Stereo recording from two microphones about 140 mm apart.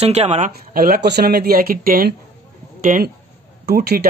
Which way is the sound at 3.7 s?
90° right.